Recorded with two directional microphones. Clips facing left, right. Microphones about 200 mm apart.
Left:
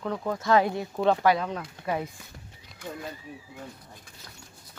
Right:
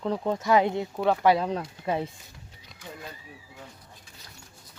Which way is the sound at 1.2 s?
30° right (ahead or behind).